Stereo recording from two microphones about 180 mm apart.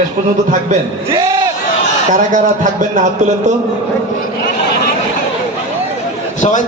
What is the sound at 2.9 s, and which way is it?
Speech, 40° right (ahead or behind).